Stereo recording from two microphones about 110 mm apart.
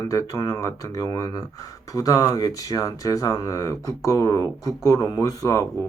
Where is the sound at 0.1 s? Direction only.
30° left (ahead or behind).